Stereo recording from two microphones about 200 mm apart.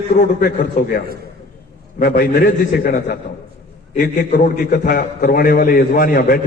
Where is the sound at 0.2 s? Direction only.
45° left (ahead or behind).